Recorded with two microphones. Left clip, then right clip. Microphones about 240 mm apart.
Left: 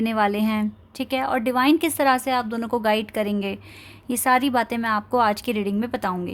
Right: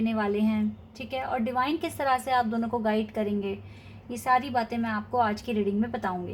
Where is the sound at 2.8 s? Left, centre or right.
Left.